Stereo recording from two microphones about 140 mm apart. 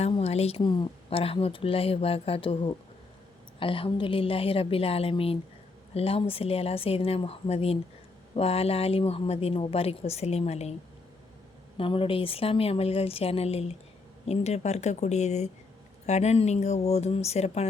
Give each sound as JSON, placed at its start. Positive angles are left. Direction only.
{"t": 0.2, "sound": "speech", "side_deg": 45}
{"t": 0.6, "sound": "a woman's voice", "side_deg": 30}
{"t": 1.2, "sound": "a woman's voice", "side_deg": 45}
{"t": 11.8, "sound": "speech", "side_deg": 40}